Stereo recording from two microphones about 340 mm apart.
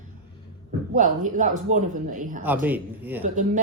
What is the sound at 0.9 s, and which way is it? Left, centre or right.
A man's voice, right.